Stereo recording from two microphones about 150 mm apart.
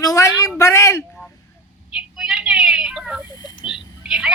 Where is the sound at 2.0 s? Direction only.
5° right (ahead or behind).